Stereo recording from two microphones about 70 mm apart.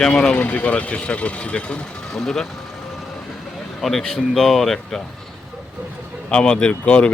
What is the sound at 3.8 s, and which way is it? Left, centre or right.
Speech, centre.